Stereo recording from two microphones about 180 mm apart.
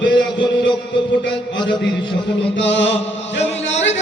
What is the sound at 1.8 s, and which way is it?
Chant, 80° left.